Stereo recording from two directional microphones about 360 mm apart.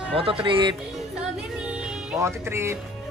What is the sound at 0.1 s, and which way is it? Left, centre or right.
Speech, centre.